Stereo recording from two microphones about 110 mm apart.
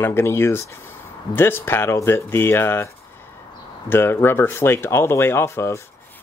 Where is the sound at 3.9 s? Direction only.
20° left (ahead or behind).